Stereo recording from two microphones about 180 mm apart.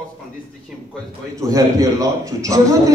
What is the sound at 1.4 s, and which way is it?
A man's voice, 20° right (ahead or behind).